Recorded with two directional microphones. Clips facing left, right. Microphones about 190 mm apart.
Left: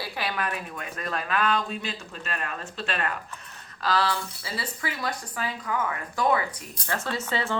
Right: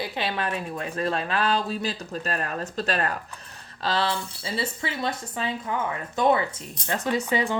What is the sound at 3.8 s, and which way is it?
Speech, 25° right (ahead or behind).